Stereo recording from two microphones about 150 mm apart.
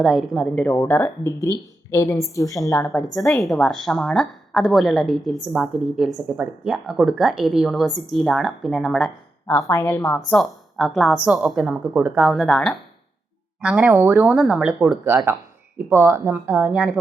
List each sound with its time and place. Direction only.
0.0 s a woman's voice: centre (ahead or behind)
3.2 s a woman's voice: centre (ahead or behind)
9.5 s speech: 15° left (ahead or behind)
10.2 s a woman's voice: centre (ahead or behind)
13.9 s speech: 15° right (ahead or behind)
14.3 s a woman's voice: 5° right (ahead or behind)